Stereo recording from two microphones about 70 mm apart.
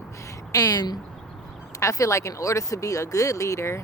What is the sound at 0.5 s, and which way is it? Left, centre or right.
Speech, left.